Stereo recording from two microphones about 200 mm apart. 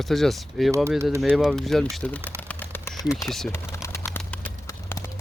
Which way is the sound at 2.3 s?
5° left (ahead or behind).